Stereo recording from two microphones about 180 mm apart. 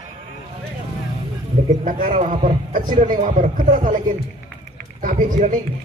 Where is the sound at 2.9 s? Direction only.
45° right (ahead or behind).